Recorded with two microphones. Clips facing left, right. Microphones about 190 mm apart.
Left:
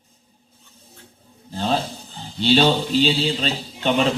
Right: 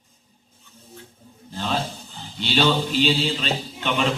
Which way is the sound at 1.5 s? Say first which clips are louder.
Left 5 dB; 40° left (ahead or behind).